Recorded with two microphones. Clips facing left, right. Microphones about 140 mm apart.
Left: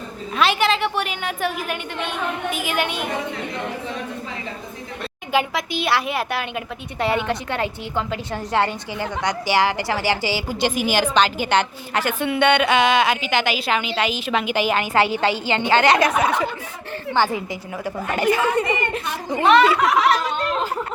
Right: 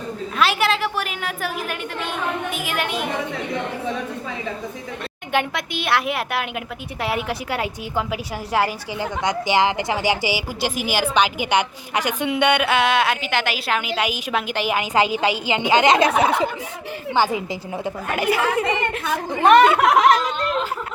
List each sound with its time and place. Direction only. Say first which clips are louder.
0.3 s a woman's voice: left 1 dB; centre (ahead or behind)
5.3 s a woman's voice: left 1 dB; 5° left (ahead or behind)
9.2 s a woman's voice: right 1 dB; 20° right (ahead or behind)
14.4 s a woman's voice: left 2 dB; centre (ahead or behind)
14.8 s a woman's voice: even; 15° right (ahead or behind)
17.2 s a woman's voice: right 1 dB; 15° right (ahead or behind)
19.5 s speech: right 2 dB; 50° right (ahead or behind)